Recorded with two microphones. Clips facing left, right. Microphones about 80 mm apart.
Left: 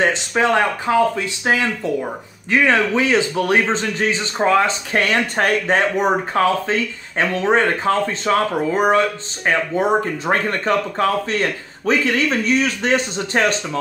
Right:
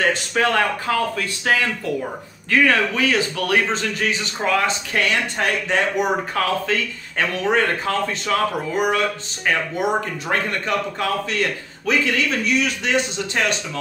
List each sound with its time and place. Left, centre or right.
0.0 s a man's voice: left